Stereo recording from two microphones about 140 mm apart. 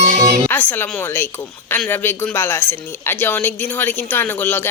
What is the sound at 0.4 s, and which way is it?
Speech, 10° left (ahead or behind).